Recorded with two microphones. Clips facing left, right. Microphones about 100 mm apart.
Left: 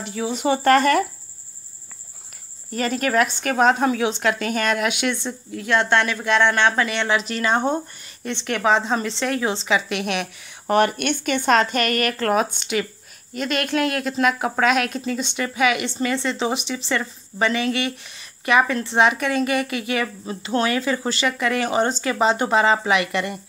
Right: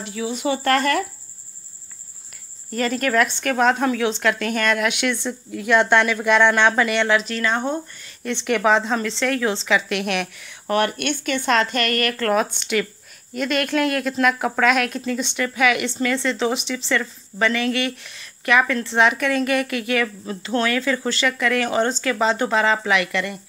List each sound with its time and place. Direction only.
0.3 s speech: 25° left (ahead or behind)
2.7 s a woman's voice: 5° left (ahead or behind)
8.2 s a woman's voice: 5° right (ahead or behind)
10.7 s a woman's voice: 20° left (ahead or behind)
18.6 s speech: 20° left (ahead or behind)
18.9 s a woman's voice: 5° left (ahead or behind)
19.5 s speech: 5° left (ahead or behind); by 23.4 s 20° left (ahead or behind)